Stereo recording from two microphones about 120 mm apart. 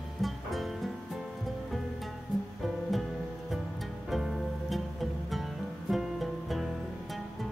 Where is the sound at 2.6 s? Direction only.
Centre (ahead or behind).